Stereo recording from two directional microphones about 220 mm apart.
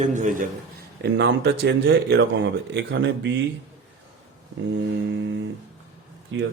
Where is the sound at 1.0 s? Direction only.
50° right (ahead or behind).